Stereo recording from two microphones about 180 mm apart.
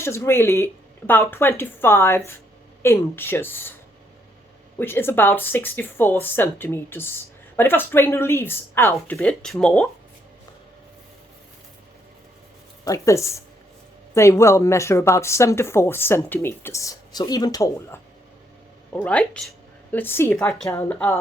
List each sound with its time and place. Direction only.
0.0 s speech: 15° left (ahead or behind)
4.8 s speech: 10° left (ahead or behind)
9.1 s speech: centre (ahead or behind)
12.8 s speech: 15° left (ahead or behind)
19.0 s a woman's voice: 5° left (ahead or behind)